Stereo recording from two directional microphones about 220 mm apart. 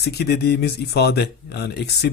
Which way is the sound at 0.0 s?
45° left (ahead or behind).